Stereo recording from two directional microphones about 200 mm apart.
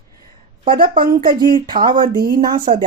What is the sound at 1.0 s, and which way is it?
Speech, 45° right (ahead or behind).